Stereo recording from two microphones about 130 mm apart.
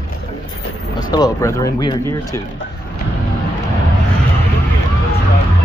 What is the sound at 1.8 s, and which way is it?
Speech, 35° left (ahead or behind).